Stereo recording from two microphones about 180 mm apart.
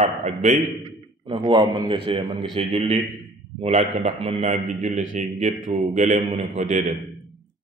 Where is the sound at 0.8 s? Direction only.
25° right (ahead or behind).